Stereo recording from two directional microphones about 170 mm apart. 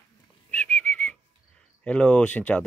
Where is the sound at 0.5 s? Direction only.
10° left (ahead or behind).